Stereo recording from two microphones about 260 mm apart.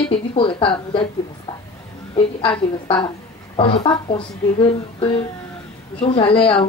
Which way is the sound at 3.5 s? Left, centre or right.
Left.